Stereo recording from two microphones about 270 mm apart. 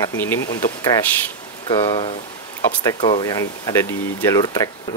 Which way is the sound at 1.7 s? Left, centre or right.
Centre.